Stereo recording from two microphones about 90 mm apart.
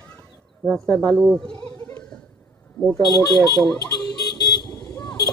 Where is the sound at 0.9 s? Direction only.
Centre (ahead or behind).